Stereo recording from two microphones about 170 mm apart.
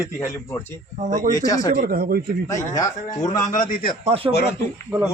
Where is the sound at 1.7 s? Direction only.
55° right (ahead or behind).